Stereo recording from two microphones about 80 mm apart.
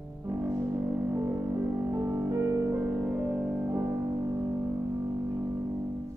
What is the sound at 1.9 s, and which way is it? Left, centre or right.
Music, right.